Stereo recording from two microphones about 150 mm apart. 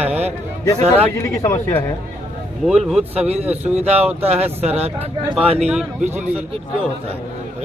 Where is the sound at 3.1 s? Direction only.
45° right (ahead or behind).